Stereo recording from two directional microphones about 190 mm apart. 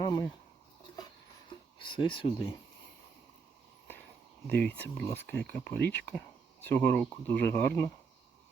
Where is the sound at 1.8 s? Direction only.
25° left (ahead or behind).